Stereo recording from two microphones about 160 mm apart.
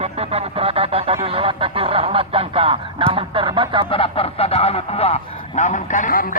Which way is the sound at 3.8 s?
35° left (ahead or behind).